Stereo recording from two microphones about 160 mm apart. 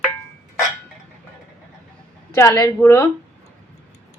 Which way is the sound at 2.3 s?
20° left (ahead or behind).